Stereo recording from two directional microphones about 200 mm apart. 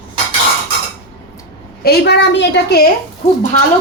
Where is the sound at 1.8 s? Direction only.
55° left (ahead or behind).